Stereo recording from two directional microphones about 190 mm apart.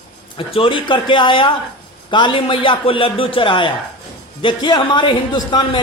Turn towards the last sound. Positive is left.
turn(degrees=25)  # may be behind; listen again after turning